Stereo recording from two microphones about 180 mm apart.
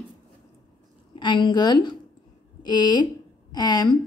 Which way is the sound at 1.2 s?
25° left (ahead or behind).